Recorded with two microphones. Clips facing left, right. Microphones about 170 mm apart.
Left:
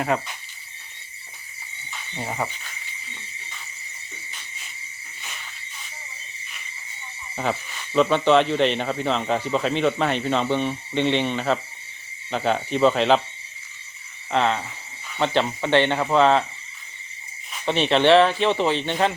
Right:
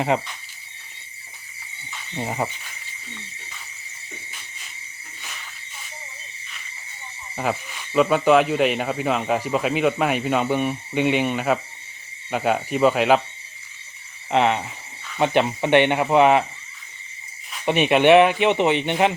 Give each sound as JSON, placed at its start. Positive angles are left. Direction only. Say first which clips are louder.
{"t": 0.1, "sound": "speech", "louder": "right 2 dB", "side_deg": -20}
{"t": 2.1, "sound": "speech", "louder": "right 3 dB", "side_deg": -20}
{"t": 7.3, "sound": "speech", "louder": "right 1 dB", "side_deg": -5}
{"t": 14.3, "sound": "speech", "louder": "right 3 dB", "side_deg": -20}
{"t": 17.7, "sound": "speech", "louder": "right 2 dB", "side_deg": -15}